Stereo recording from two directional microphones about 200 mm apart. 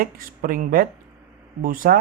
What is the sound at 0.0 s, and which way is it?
Speech, 45° right (ahead or behind).